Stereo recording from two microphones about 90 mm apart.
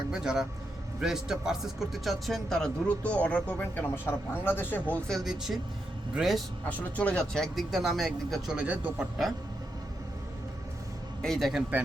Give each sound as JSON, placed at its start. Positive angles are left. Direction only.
{"t": 0.1, "sound": "speech", "side_deg": -5}
{"t": 3.0, "sound": "speech", "side_deg": 15}
{"t": 5.2, "sound": "speech", "side_deg": -5}
{"t": 6.7, "sound": "speech", "side_deg": 15}
{"t": 8.5, "sound": "a man's voice", "side_deg": -15}
{"t": 11.2, "sound": "speech", "side_deg": 5}